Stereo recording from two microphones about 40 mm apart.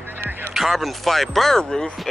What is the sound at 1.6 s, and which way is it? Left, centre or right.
Speech, centre.